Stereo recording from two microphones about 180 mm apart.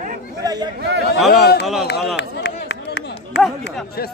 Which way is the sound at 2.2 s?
80° left.